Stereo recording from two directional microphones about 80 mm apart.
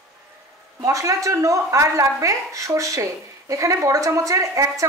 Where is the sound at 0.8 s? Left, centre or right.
Right.